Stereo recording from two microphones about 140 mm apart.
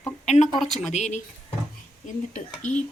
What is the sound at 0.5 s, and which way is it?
Speech, centre (ahead or behind).